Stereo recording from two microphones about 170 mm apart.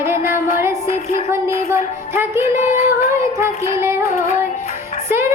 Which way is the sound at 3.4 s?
15° right (ahead or behind).